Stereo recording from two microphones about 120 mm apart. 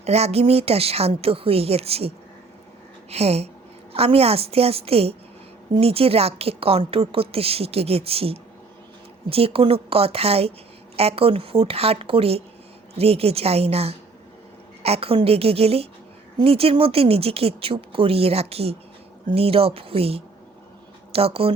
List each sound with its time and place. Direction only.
0.0 s a woman's voice: 60° right (ahead or behind)